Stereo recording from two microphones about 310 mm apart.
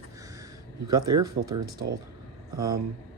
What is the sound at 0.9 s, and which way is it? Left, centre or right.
Speech, centre.